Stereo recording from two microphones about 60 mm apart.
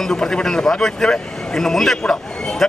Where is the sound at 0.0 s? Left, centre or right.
Centre.